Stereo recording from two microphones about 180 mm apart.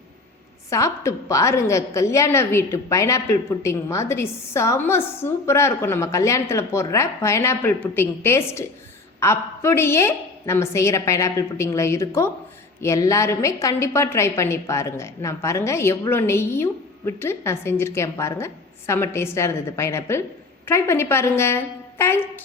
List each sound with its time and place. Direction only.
0.7 s a woman's voice: 15° left (ahead or behind)